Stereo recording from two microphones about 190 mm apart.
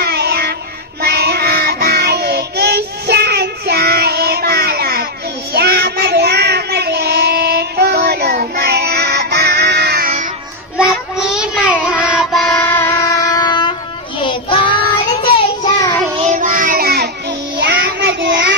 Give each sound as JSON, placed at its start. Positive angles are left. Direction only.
{"t": 0.0, "sound": "music", "side_deg": -60}
{"t": 1.0, "sound": "child singing", "side_deg": -60}
{"t": 10.8, "sound": "child singing", "side_deg": -5}
{"t": 12.6, "sound": "music", "side_deg": 10}
{"t": 14.2, "sound": "child singing", "side_deg": 25}
{"t": 16.3, "sound": "child singing", "side_deg": -45}
{"t": 17.6, "sound": "child singing", "side_deg": -70}